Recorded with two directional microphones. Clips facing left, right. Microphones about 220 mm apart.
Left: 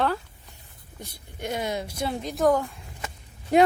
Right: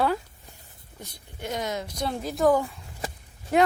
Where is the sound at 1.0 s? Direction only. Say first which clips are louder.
Left 2 dB; 15° left (ahead or behind).